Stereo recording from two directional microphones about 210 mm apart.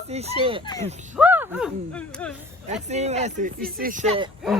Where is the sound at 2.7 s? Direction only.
30° right (ahead or behind).